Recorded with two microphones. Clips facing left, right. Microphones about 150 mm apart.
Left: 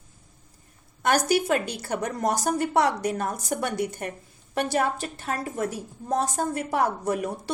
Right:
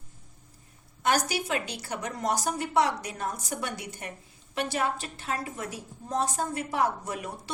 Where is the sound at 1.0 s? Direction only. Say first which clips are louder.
Left 5 dB; 50° left (ahead or behind).